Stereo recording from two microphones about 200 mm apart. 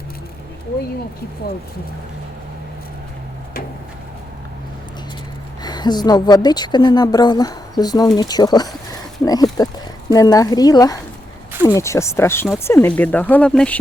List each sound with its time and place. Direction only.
5.6 s speech: 20° left (ahead or behind); by 13.7 s 5° left (ahead or behind)